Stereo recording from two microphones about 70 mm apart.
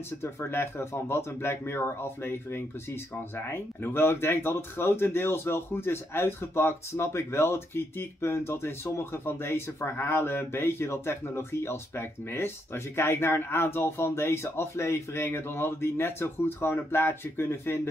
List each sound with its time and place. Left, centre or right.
0.2 s speech: left